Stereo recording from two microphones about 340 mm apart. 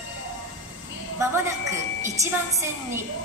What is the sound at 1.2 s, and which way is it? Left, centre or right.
A woman's voice, centre.